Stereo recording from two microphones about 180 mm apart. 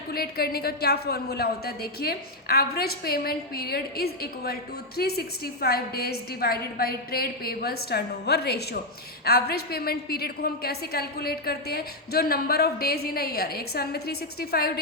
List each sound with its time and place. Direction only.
0.1 s a woman's voice: 60° left (ahead or behind)